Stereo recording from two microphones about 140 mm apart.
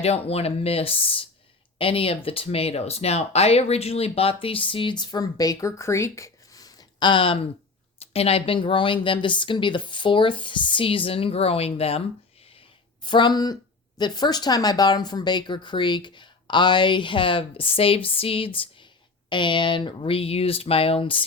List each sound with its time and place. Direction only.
0.0 s speech: 45° left (ahead or behind)
12.5 s a sound: 35° left (ahead or behind)
14.0 s speech: 30° left (ahead or behind)